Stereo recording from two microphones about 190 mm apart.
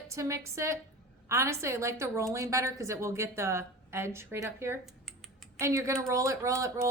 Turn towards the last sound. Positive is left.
turn(degrees=-15)  # may be behind; listen again after turning